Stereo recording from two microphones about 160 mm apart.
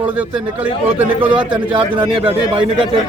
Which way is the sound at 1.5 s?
30° right (ahead or behind).